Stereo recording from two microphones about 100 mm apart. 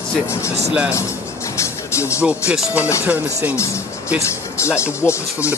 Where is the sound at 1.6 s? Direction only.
30° left (ahead or behind).